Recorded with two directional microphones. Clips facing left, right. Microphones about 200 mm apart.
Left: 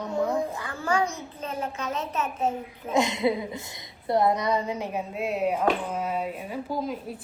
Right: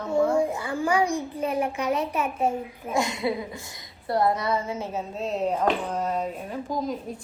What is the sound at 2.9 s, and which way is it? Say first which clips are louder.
A woman's voice: left 2 dB; 20° left (ahead or behind).